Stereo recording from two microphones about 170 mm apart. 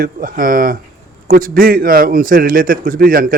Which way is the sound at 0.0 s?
55° right (ahead or behind).